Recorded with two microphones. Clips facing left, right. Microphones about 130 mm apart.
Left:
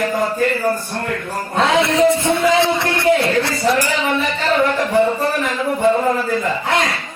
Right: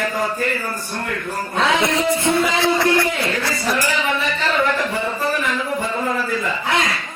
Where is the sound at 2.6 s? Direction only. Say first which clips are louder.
Left 1 dB; 25° left (ahead or behind).